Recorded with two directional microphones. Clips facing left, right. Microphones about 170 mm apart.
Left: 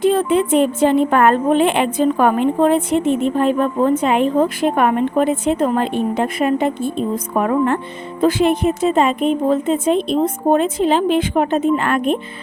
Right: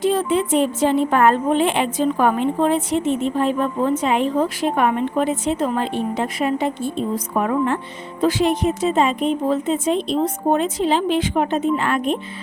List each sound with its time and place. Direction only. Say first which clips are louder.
0.0 s a woman's voice: left 4 dB; 55° left (ahead or behind)